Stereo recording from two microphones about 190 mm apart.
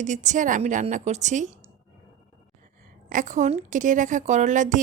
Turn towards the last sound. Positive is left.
turn(degrees=-40)  # may be behind; listen again after turning